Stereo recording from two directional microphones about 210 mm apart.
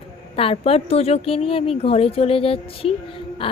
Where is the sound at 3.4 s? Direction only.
25° left (ahead or behind).